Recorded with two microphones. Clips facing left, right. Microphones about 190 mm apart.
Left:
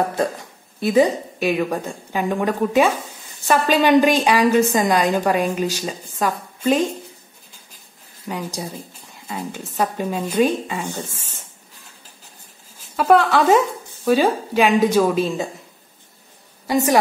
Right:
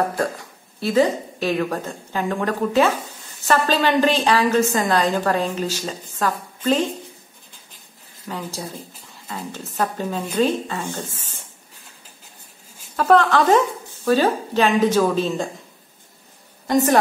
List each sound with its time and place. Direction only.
0.7 s a woman's voice: 15° left (ahead or behind)
8.3 s a woman's voice: 15° left (ahead or behind)
12.9 s a woman's voice: 10° left (ahead or behind)
16.6 s a woman's voice: 10° left (ahead or behind)